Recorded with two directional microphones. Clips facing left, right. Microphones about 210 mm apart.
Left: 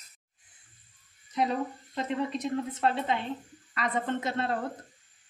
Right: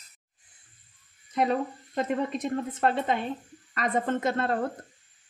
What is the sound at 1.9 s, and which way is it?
A woman's voice, 50° right (ahead or behind).